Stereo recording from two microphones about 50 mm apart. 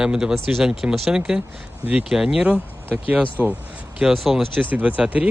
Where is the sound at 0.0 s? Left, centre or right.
Centre.